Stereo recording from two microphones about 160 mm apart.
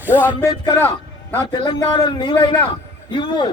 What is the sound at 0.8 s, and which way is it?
Speech, 10° left (ahead or behind).